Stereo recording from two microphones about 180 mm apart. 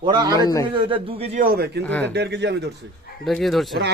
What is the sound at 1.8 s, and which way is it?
Speech, 10° left (ahead or behind).